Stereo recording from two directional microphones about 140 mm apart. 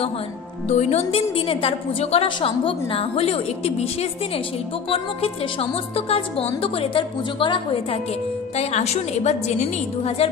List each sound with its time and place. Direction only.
0.7 s a woman's voice: 50° left (ahead or behind)
8.5 s a woman's voice: 50° left (ahead or behind)